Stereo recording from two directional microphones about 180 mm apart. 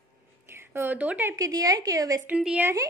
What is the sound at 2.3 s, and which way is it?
Speech, 5° right (ahead or behind).